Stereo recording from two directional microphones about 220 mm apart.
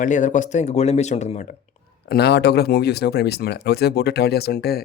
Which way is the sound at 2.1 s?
45° left (ahead or behind).